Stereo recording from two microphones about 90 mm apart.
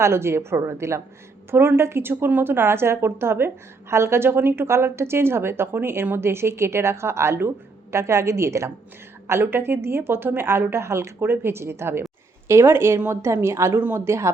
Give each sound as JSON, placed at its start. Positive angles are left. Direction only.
{"t": 0.0, "sound": "a woman's voice", "side_deg": -30}